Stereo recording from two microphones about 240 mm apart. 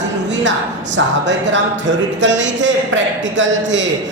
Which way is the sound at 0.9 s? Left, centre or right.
Right.